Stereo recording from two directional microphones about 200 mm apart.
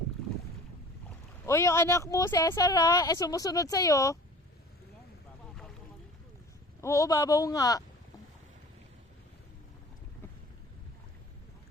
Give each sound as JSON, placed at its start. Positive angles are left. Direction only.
{"t": 1.5, "sound": "speech", "side_deg": 15}
{"t": 6.8, "sound": "speech", "side_deg": 15}